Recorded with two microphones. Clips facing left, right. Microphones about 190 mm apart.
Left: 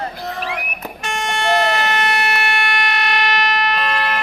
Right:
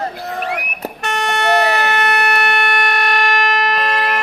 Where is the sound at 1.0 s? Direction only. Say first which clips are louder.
Right 3 dB; 65° right (ahead or behind).